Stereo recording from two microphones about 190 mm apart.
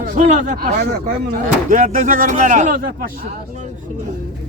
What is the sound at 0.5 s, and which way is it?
Speech, 55° right (ahead or behind).